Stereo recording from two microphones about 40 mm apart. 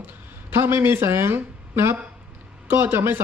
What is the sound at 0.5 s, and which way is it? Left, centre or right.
Speech, right.